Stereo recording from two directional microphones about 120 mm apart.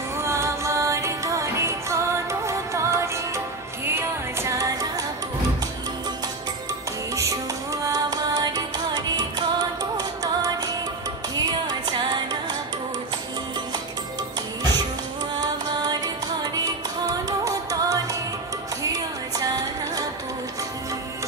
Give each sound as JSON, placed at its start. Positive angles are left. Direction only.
{"t": 0.2, "sound": "music", "side_deg": -25}
{"t": 7.8, "sound": "music", "side_deg": -30}
{"t": 15.4, "sound": "music", "side_deg": -35}